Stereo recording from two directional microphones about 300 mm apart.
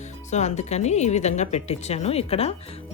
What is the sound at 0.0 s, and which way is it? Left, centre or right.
Speech, left.